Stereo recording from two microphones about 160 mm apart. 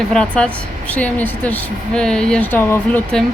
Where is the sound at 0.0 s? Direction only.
5° left (ahead or behind).